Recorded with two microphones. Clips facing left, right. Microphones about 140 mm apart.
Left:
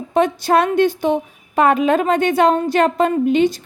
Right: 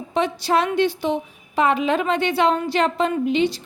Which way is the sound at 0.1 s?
50° left (ahead or behind).